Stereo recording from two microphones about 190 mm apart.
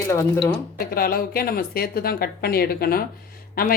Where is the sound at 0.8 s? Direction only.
50° left (ahead or behind).